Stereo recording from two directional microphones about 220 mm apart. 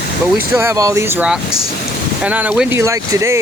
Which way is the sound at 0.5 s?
10° right (ahead or behind).